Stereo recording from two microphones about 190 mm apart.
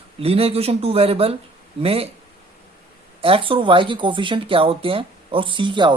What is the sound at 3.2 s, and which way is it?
Speech, 25° right (ahead or behind).